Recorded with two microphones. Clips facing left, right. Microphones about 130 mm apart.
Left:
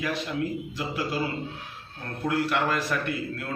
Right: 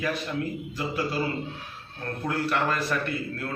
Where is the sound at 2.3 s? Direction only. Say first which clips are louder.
Left 1 dB; 15° left (ahead or behind).